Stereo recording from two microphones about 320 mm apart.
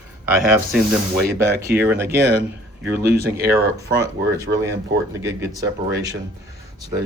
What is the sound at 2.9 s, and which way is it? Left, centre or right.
Speech, right.